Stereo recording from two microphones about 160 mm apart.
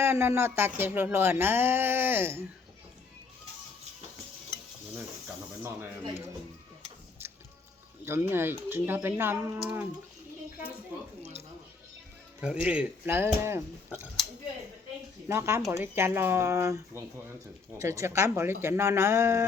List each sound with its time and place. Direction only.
0.0 s speech: 15° right (ahead or behind)
8.0 s speech: 15° right (ahead or behind)
11.2 s a sound: 40° right (ahead or behind)
12.4 s speech: 5° right (ahead or behind)
15.3 s speech: 15° right (ahead or behind)